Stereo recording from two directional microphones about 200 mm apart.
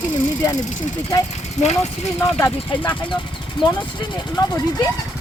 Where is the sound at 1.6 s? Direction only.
35° left (ahead or behind).